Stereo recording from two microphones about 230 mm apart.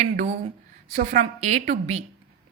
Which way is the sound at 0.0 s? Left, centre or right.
Right.